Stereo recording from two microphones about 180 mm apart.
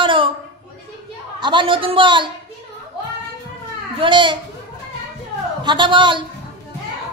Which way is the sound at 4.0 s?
25° right (ahead or behind).